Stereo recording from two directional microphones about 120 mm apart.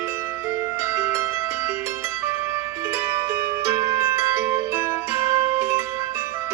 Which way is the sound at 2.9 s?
20° right (ahead or behind).